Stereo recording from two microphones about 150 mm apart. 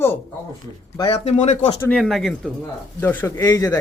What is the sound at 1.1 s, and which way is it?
Speech, 45° left (ahead or behind).